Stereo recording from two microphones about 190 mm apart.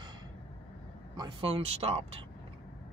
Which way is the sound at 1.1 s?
25° right (ahead or behind).